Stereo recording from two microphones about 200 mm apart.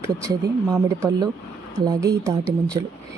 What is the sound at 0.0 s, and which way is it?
Speech, 15° right (ahead or behind).